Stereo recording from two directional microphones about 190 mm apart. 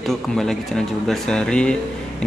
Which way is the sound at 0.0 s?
Centre (ahead or behind).